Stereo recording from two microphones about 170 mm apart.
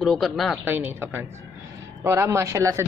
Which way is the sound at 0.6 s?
10° right (ahead or behind).